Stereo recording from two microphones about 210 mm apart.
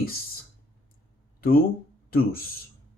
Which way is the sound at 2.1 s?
45° left (ahead or behind).